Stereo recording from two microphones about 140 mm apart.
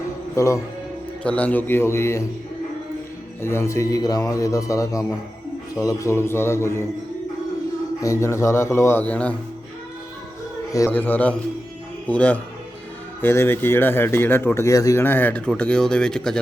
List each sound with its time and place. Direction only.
0.3 s a man's voice: 20° left (ahead or behind)
1.2 s speech: 10° left (ahead or behind)
3.4 s a man's voice: 20° left (ahead or behind)
8.0 s a man's voice: 20° left (ahead or behind)
10.7 s a man's voice: 25° left (ahead or behind)
10.9 s speech: 10° left (ahead or behind)